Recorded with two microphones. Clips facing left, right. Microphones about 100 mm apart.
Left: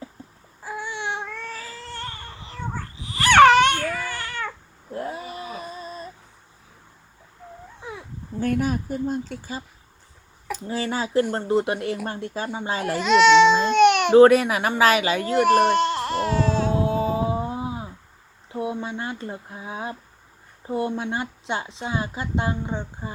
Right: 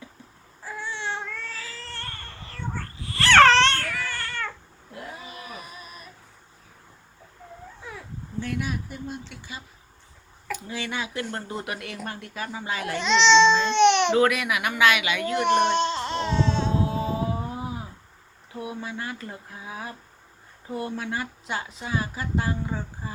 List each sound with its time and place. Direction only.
0.6 s baby cry: 15° left (ahead or behind)
1.7 s a sound: 15° left (ahead or behind)
4.9 s cat: 40° left (ahead or behind)
5.1 s a sound: 25° left (ahead or behind)
7.8 s a sound: 20° left (ahead or behind)
8.4 s a woman's voice: 45° left (ahead or behind)
13.0 s speech: 5° left (ahead or behind)
13.7 s baby cry: 5° left (ahead or behind)
14.1 s speech: 35° left (ahead or behind)
15.6 s baby cry: centre (ahead or behind)
16.7 s a sound: 25° left (ahead or behind)
18.5 s a woman's voice: 25° left (ahead or behind)